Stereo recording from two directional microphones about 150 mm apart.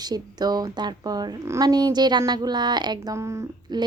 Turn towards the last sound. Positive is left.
turn(degrees=-20)  # may be behind; listen again after turning